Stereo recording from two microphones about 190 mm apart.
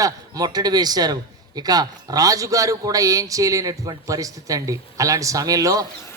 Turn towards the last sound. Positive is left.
turn(degrees=-20)  # may be behind; listen again after turning